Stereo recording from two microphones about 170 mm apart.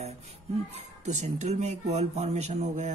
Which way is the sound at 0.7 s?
40° right (ahead or behind).